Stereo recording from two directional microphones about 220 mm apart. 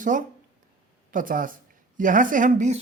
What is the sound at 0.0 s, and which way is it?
Speech, 35° right (ahead or behind).